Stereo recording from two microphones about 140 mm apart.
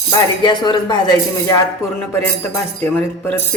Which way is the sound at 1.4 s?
20° left (ahead or behind).